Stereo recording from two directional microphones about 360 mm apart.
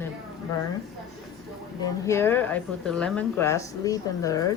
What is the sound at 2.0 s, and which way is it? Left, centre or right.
Speech, centre.